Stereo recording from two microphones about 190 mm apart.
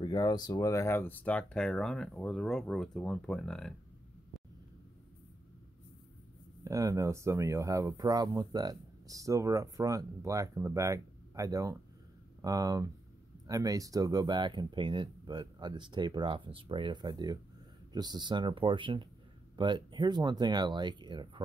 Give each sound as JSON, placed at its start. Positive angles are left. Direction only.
{"t": 0.0, "sound": "speech", "side_deg": 20}
{"t": 6.6, "sound": "speech", "side_deg": -15}